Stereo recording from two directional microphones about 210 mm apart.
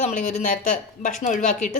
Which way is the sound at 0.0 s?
35° left (ahead or behind).